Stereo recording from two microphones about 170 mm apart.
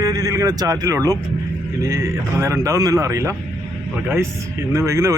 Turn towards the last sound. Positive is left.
turn(degrees=-15)  # may be behind; listen again after turning